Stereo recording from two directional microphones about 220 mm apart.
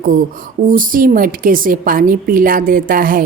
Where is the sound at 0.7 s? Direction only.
40° right (ahead or behind).